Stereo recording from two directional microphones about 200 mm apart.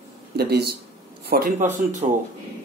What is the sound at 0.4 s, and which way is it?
Speech, 55° right (ahead or behind).